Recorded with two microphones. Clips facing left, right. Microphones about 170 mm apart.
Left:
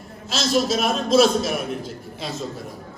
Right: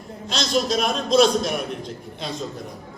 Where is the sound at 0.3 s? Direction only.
5° left (ahead or behind).